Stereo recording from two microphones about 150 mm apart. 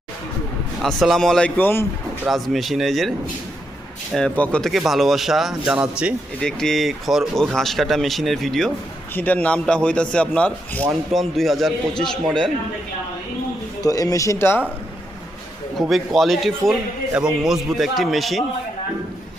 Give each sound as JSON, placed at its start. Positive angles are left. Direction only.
{"t": 0.8, "sound": "speech", "side_deg": 0}
{"t": 2.2, "sound": "speech", "side_deg": 0}
{"t": 4.1, "sound": "a man's voice", "side_deg": 5}
{"t": 13.8, "sound": "speech", "side_deg": 25}
{"t": 15.9, "sound": "speech", "side_deg": 0}